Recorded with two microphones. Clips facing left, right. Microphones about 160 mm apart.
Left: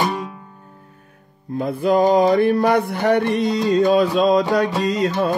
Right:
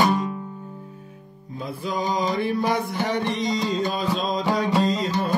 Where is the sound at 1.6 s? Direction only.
65° left (ahead or behind).